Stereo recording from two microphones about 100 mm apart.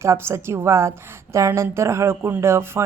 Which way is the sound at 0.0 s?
25° right (ahead or behind).